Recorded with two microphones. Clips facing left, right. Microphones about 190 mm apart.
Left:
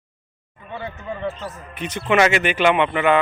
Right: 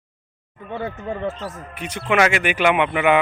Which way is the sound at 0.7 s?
50° right (ahead or behind).